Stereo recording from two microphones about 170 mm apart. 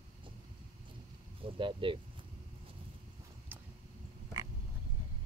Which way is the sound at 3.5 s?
10° right (ahead or behind).